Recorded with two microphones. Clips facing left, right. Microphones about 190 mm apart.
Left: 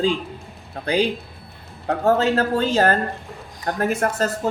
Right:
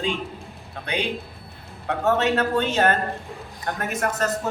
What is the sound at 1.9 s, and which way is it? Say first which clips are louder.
Speech: left 3 dB; 35° left (ahead or behind).